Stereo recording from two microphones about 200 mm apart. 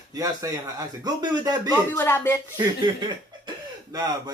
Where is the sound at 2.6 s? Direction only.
20° right (ahead or behind).